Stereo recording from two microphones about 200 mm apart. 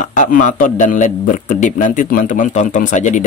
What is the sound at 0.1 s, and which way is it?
A man's voice, 40° left (ahead or behind).